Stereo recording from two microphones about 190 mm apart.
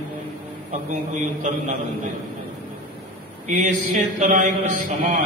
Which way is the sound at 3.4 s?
40° right (ahead or behind).